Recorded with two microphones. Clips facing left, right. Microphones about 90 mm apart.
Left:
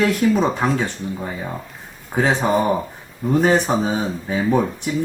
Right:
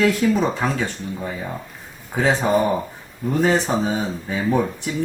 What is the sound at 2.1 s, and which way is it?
Speech, 35° left (ahead or behind).